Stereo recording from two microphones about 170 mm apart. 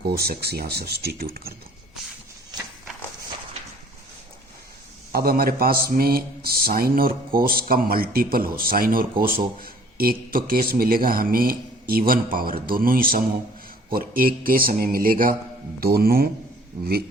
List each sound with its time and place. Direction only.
0.0 s speech: 65° right (ahead or behind)
5.1 s speech: 60° right (ahead or behind)